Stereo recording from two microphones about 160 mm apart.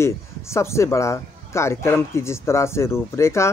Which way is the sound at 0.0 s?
15° left (ahead or behind).